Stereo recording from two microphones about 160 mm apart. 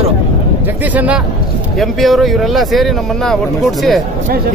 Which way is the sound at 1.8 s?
Centre (ahead or behind).